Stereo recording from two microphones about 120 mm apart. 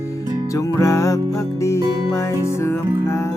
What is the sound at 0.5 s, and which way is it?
Music, 25° left (ahead or behind).